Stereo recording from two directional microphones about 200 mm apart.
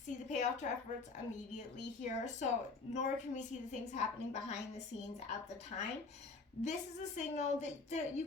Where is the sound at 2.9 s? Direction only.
35° left (ahead or behind).